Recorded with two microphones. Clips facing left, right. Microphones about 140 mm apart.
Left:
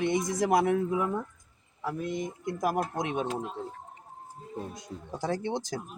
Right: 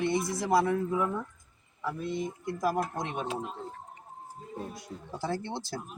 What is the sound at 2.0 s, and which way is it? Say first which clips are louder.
Speech: even; 15° left (ahead or behind).